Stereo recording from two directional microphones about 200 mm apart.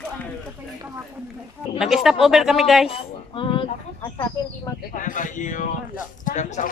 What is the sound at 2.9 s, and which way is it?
Speech, 25° left (ahead or behind).